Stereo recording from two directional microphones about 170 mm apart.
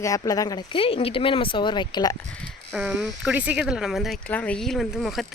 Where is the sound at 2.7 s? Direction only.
10° right (ahead or behind).